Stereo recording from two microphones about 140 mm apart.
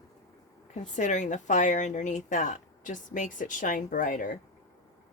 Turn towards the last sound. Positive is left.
turn(degrees=70)  # may be behind; listen again after turning